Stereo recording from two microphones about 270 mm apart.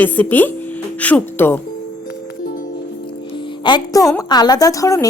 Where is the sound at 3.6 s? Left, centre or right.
Centre.